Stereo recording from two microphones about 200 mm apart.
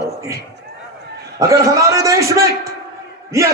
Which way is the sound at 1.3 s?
15° right (ahead or behind).